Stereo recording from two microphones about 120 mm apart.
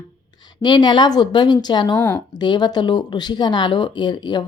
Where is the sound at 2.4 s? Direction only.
35° left (ahead or behind).